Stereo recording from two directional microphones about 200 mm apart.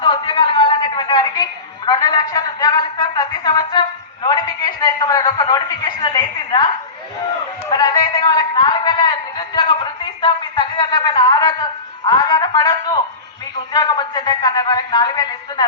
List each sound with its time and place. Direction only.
0.0 s a woman's voice: 25° left (ahead or behind)
7.7 s a sound: 20° left (ahead or behind)
13.7 s a man's voice: 20° left (ahead or behind)